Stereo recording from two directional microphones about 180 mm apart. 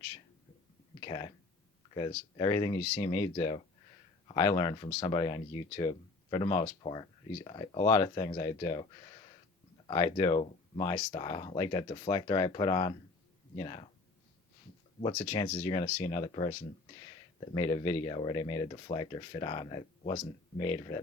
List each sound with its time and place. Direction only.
1.0 s speech: 25° left (ahead or behind)
15.2 s speech: 25° left (ahead or behind)